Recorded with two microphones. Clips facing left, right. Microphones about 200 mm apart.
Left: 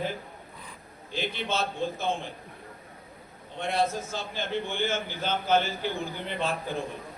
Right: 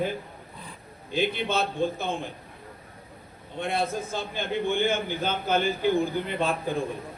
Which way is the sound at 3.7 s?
55° right (ahead or behind).